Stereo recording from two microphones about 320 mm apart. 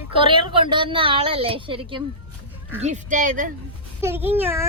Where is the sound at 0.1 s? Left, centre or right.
Centre.